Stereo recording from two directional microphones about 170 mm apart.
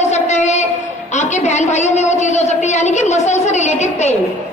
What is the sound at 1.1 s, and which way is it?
A woman's voice, 45° left (ahead or behind).